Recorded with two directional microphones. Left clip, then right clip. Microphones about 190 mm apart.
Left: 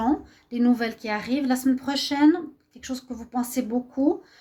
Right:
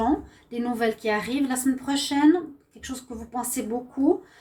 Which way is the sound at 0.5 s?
50° left (ahead or behind).